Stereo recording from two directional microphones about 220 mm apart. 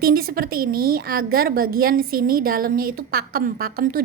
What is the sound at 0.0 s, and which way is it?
A woman's voice, 45° right (ahead or behind).